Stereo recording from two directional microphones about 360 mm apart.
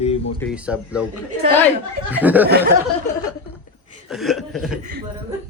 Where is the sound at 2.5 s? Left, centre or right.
Right.